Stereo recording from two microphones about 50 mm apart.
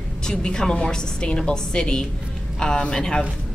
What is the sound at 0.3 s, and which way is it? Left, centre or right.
Speech, centre.